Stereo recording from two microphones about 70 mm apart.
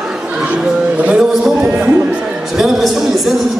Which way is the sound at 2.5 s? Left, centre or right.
Centre.